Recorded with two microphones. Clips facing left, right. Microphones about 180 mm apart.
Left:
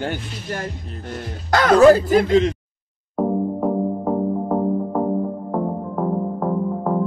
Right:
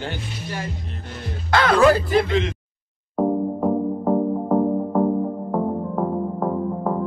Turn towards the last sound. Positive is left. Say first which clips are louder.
# left 2 dB
turn(degrees=0)  # may be behind; listen again after turning